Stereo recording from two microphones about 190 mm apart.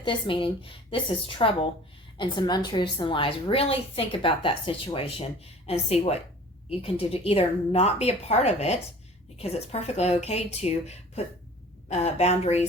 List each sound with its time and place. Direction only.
0.0 s a woman's voice: 25° left (ahead or behind)